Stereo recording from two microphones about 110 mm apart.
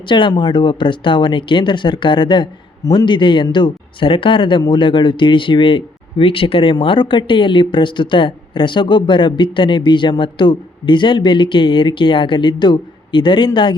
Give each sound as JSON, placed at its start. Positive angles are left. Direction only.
{"t": 0.1, "sound": "speech", "side_deg": 45}